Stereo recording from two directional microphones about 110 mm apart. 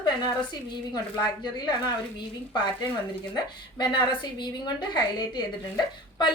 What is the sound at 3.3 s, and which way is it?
A woman's voice, 40° left (ahead or behind).